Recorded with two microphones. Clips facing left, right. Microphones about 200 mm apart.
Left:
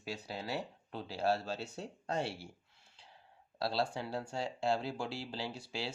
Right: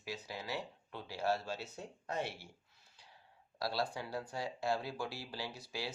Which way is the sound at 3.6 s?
25° left (ahead or behind).